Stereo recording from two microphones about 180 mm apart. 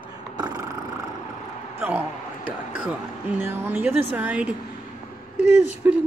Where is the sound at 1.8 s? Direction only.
10° right (ahead or behind).